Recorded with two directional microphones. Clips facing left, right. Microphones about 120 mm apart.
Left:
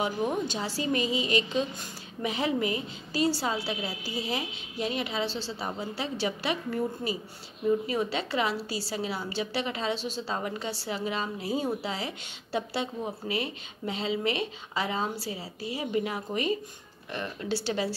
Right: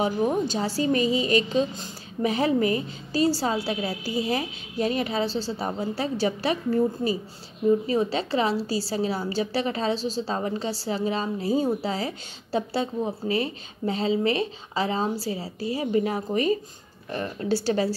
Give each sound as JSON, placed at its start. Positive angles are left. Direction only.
{"t": 0.0, "sound": "a woman's voice", "side_deg": -35}